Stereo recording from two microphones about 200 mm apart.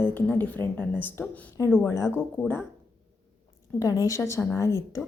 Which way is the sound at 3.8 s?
15° left (ahead or behind).